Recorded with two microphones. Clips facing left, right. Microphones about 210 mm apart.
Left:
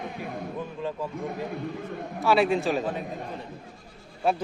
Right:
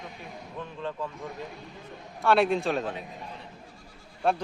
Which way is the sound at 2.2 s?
Centre (ahead or behind).